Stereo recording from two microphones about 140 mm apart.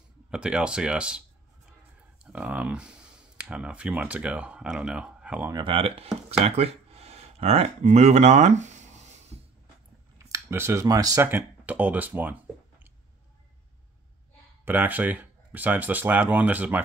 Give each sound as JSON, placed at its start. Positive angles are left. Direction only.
{"t": 0.3, "sound": "speech", "side_deg": -5}
{"t": 2.2, "sound": "speech", "side_deg": -10}
{"t": 5.5, "sound": "speech", "side_deg": -35}
{"t": 6.4, "sound": "a sound", "side_deg": -45}
{"t": 10.1, "sound": "speech", "side_deg": -20}
{"t": 14.6, "sound": "speech", "side_deg": -15}